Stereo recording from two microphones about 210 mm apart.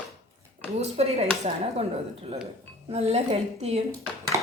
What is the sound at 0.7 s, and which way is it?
Speech, 30° right (ahead or behind).